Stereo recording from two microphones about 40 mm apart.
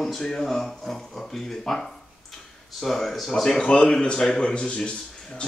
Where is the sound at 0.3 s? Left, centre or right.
Centre.